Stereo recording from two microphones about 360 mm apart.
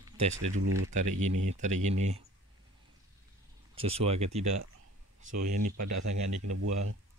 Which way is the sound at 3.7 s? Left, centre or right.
Centre.